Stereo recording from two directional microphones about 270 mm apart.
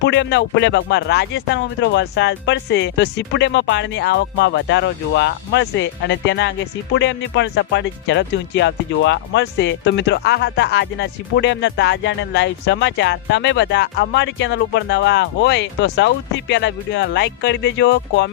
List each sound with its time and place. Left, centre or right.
0.0 s speech: left